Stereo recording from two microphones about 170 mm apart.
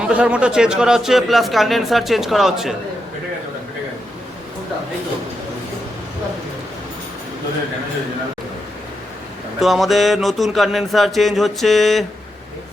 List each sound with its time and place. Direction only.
0.0 s a man's voice: 5° right (ahead or behind)
9.6 s a man's voice: centre (ahead or behind)